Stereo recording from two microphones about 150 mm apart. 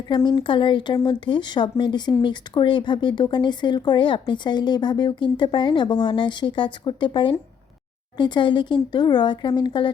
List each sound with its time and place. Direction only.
0.1 s speech: 30° left (ahead or behind)